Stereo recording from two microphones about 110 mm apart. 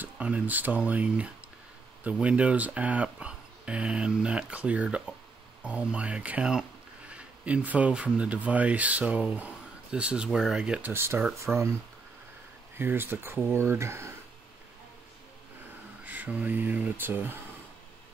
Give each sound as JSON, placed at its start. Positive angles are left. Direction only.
{"t": 0.0, "sound": "speech", "side_deg": -15}
{"t": 10.9, "sound": "speech", "side_deg": -20}
{"t": 11.5, "sound": "speech", "side_deg": -5}
{"t": 12.7, "sound": "speech", "side_deg": -20}
{"t": 16.0, "sound": "speech", "side_deg": -15}